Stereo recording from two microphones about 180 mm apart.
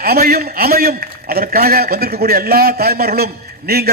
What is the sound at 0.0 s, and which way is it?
A man's voice, 60° right (ahead or behind).